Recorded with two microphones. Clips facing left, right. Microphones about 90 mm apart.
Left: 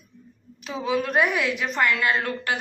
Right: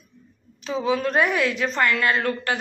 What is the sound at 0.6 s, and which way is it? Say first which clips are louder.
A woman's voice: right 3 dB; 5° left (ahead or behind).